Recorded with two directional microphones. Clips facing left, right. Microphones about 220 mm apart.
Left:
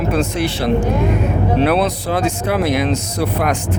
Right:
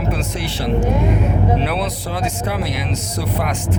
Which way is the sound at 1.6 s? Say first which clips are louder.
Left 6 dB; 50° left (ahead or behind).